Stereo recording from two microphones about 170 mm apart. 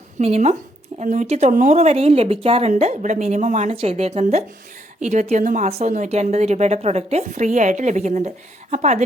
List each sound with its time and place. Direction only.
0.2 s a woman's voice: 40° right (ahead or behind)